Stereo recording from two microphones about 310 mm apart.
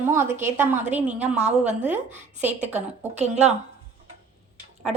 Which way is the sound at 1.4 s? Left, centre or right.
Right.